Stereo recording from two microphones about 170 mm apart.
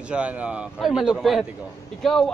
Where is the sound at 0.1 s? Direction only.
5° right (ahead or behind).